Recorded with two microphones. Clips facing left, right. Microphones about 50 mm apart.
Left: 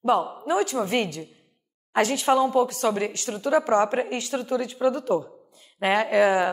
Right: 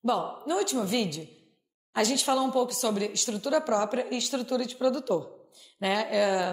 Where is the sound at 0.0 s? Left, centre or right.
Left.